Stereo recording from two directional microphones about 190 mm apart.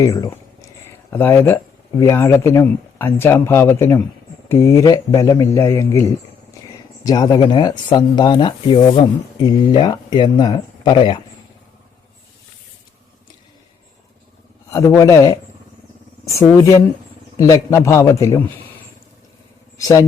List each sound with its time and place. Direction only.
0.0 s speech: 20° left (ahead or behind)
14.7 s speech: 15° left (ahead or behind)
19.8 s speech: 15° left (ahead or behind)